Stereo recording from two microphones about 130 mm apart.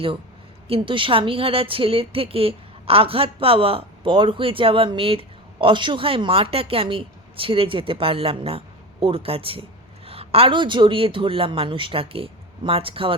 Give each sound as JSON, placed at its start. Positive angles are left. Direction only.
{"t": 0.7, "sound": "speech", "side_deg": -40}